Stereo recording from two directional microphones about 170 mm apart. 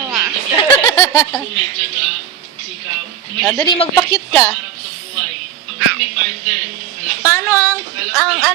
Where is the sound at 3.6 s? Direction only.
35° left (ahead or behind).